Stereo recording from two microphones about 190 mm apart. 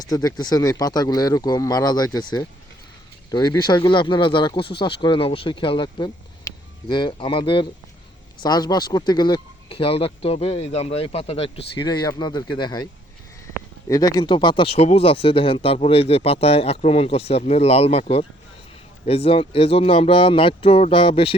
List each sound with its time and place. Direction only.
0.0 s speech: 20° left (ahead or behind)